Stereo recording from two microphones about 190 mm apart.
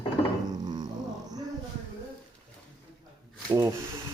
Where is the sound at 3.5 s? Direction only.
15° right (ahead or behind).